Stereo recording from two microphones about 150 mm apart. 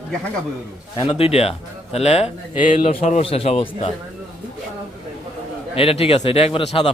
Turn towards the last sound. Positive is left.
turn(degrees=40)  # may be behind; listen again after turning